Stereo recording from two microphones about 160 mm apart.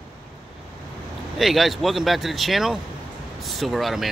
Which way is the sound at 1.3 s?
Centre (ahead or behind).